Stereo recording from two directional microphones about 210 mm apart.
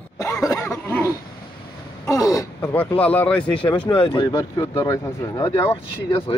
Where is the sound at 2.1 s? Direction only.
15° left (ahead or behind).